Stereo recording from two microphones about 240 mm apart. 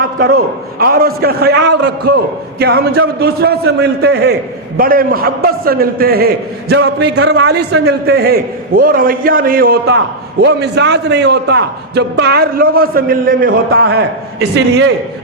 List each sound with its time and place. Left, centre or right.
0.0 s a man's voice: right
7.9 s a man's voice: right